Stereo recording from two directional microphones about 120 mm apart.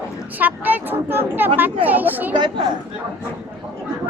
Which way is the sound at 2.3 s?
40° right (ahead or behind).